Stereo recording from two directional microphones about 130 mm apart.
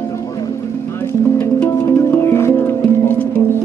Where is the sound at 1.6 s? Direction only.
15° left (ahead or behind).